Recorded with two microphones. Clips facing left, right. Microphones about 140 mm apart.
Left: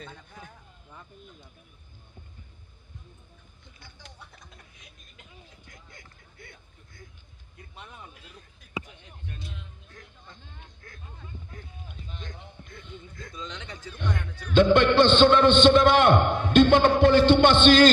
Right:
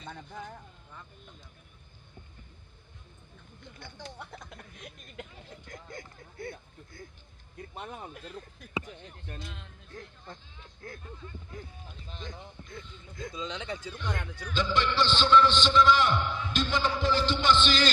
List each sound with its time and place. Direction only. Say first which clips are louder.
4.2 s speech: right 6 dB; 60° right (ahead or behind)
5.7 s speech: right 8 dB; 40° right (ahead or behind)
7.7 s speech: right 5 dB; 45° right (ahead or behind)
9.3 s speech: left 1 dB; 60° right (ahead or behind)
10.8 s speech: right 10 dB; 30° right (ahead or behind)
11.9 s a man's voice: left 3 dB; 60° left (ahead or behind)
13.1 s speech: right 5 dB; 15° right (ahead or behind)
14.5 s a man's voice: left 10 dB; 60° left (ahead or behind)